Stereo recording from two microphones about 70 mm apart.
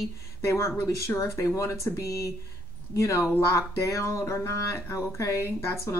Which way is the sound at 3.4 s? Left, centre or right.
Left.